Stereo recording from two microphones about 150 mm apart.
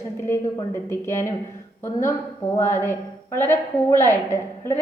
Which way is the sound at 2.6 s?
20° left (ahead or behind).